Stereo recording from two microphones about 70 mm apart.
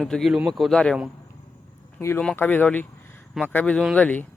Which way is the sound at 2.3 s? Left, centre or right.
Left.